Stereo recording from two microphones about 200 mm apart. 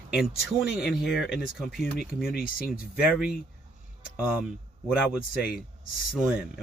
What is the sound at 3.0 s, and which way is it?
Speech, 5° right (ahead or behind).